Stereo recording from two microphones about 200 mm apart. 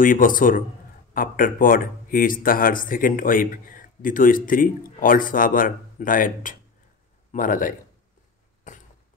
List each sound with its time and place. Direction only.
0.0 s a man's voice: 45° left (ahead or behind)